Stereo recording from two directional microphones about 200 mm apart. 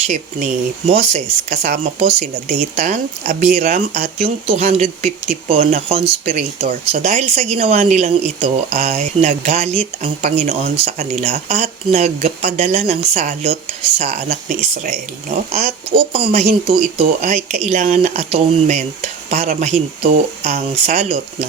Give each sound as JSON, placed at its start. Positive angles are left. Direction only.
{"t": 0.9, "sound": "speech", "side_deg": -35}
{"t": 15.9, "sound": "speech", "side_deg": -25}